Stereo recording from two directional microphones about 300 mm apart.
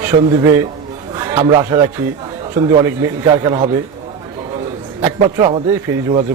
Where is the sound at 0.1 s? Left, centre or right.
Centre.